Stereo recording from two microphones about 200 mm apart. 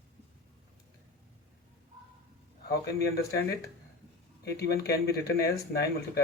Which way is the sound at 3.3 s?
55° left (ahead or behind).